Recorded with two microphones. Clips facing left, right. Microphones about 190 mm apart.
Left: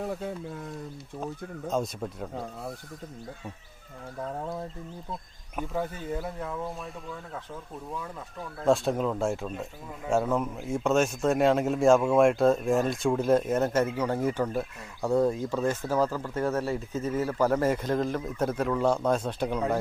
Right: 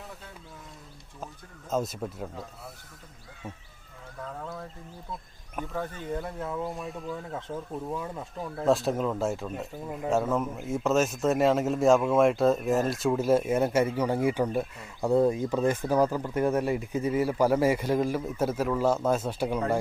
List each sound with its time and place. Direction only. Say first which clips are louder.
0.0 s speech: left 13 dB; 55° left (ahead or behind)
1.7 s a man's voice: right 1 dB; 5° right (ahead or behind)
5.7 s speech: left 1 dB; 15° left (ahead or behind)
6.2 s a man's voice: right 1 dB; centre (ahead or behind)
8.6 s a man's voice: left 1 dB; centre (ahead or behind)